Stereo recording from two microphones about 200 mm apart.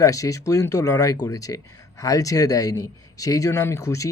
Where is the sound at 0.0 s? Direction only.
15° left (ahead or behind).